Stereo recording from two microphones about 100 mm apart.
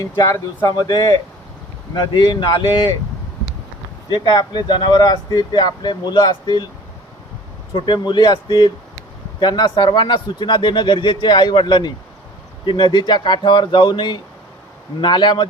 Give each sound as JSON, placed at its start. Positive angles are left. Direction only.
{"t": 0.7, "sound": "speech", "side_deg": 45}
{"t": 4.1, "sound": "speech", "side_deg": 45}
{"t": 7.7, "sound": "speech", "side_deg": 50}